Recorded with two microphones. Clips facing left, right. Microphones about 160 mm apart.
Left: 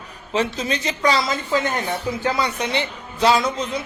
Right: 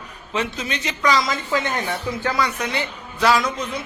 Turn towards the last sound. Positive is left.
turn(degrees=25)  # may be behind; listen again after turning